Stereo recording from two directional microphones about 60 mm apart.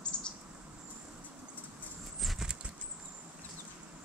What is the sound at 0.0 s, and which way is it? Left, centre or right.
Bird, centre.